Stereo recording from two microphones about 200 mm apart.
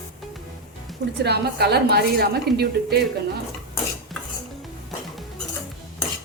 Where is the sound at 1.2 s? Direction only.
55° right (ahead or behind).